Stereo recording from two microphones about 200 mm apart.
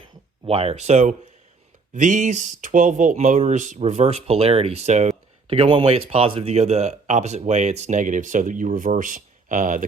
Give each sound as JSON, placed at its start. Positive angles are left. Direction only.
{"t": 0.4, "sound": "speech", "side_deg": -30}